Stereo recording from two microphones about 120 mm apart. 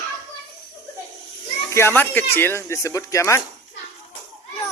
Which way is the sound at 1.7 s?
20° left (ahead or behind).